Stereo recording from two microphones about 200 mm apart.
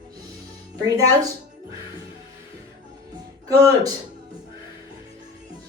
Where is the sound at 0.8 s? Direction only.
20° right (ahead or behind).